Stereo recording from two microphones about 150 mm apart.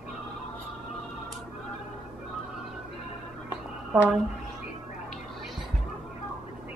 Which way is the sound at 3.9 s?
5° right (ahead or behind).